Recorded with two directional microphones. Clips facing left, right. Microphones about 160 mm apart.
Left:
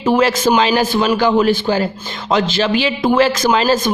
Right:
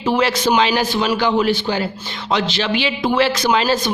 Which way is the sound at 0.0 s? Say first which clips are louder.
Left 4 dB; 45° left (ahead or behind).